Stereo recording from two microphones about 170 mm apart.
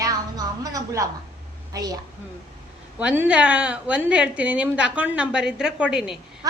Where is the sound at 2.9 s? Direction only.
10° right (ahead or behind).